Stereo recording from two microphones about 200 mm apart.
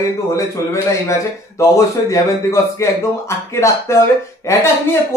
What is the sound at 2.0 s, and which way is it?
Speech, 15° left (ahead or behind).